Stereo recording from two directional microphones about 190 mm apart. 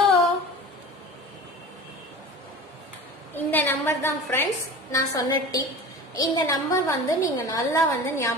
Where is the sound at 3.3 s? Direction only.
10° left (ahead or behind).